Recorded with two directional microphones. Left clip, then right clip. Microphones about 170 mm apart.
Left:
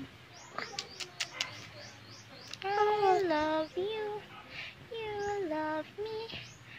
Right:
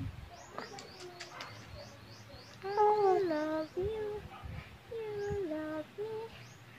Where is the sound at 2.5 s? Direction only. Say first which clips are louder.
Even; 10° right (ahead or behind).